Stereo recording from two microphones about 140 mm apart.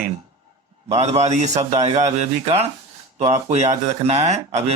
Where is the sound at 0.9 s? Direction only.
50° right (ahead or behind).